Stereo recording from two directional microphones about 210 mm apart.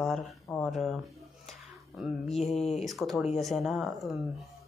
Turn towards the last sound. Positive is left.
turn(degrees=0)  # may be behind; listen again after turning